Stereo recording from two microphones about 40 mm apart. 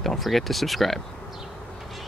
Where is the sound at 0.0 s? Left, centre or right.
Centre.